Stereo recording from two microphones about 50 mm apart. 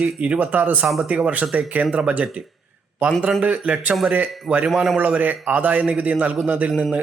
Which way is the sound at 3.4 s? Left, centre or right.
Right.